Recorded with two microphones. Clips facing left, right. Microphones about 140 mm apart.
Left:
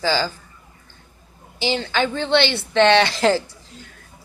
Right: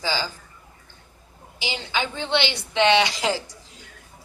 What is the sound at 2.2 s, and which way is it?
Speech, 15° right (ahead or behind).